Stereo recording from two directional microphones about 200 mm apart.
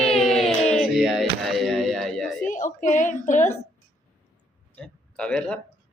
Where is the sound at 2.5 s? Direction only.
40° left (ahead or behind).